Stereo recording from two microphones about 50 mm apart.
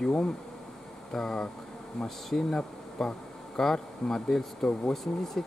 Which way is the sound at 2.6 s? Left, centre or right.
Centre.